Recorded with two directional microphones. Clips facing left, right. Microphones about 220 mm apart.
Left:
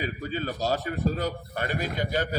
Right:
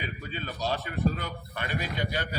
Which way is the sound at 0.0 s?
40° left (ahead or behind).